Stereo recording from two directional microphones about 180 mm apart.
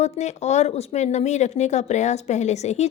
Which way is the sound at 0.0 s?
40° left (ahead or behind).